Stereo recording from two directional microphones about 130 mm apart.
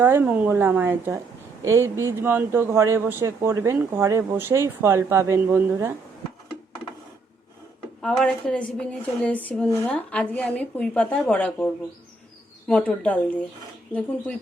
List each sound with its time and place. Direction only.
0.0 s speech: 15° right (ahead or behind)
8.0 s speech: 5° left (ahead or behind)